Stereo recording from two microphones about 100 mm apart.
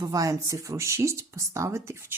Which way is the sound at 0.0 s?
35° right (ahead or behind).